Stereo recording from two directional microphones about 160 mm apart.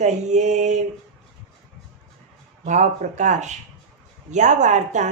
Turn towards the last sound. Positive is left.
turn(degrees=-50)  # may be behind; listen again after turning